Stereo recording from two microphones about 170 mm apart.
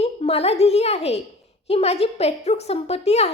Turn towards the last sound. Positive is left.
turn(degrees=40)  # may be behind; listen again after turning